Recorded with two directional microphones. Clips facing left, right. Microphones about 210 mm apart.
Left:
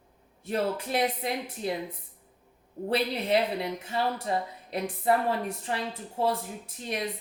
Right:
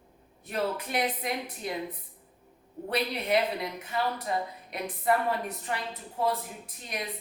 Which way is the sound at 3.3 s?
30° left (ahead or behind).